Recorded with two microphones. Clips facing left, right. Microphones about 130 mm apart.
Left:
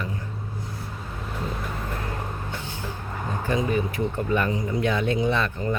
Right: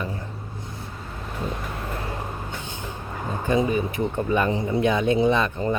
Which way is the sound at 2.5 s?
20° right (ahead or behind).